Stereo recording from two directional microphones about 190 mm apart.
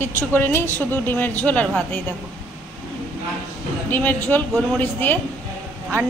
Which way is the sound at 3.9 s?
10° left (ahead or behind).